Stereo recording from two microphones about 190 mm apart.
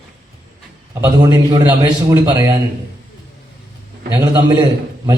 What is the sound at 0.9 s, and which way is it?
A man's voice, 15° right (ahead or behind).